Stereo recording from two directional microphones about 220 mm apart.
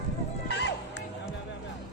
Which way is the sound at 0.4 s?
50° left (ahead or behind).